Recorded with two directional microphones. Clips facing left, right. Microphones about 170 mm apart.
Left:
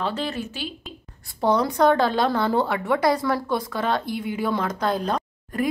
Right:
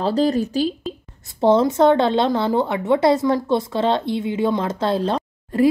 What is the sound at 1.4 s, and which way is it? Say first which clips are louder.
A woman's voice: right 5 dB; 25° right (ahead or behind).